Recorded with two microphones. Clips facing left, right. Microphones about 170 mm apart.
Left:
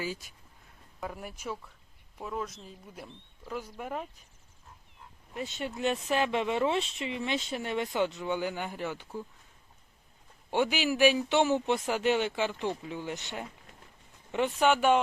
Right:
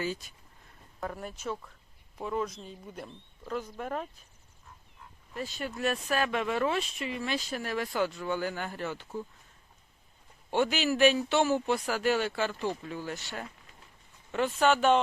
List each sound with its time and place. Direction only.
0.0 s speech: 10° left (ahead or behind)
5.3 s speech: 20° left (ahead or behind)
10.5 s speech: 15° left (ahead or behind)